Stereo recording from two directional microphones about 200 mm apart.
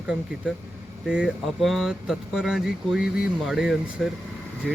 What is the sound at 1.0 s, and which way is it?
Speech, 5° right (ahead or behind).